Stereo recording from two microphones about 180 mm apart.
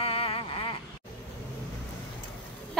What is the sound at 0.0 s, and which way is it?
Vehicle, 30° left (ahead or behind).